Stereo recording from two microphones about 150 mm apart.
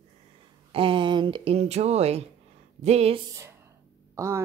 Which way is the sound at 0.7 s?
35° right (ahead or behind).